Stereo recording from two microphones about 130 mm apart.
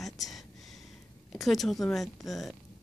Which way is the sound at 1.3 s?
Centre (ahead or behind).